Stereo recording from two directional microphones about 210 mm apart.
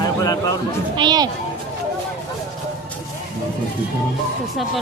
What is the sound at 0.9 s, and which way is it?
Speech, 20° right (ahead or behind).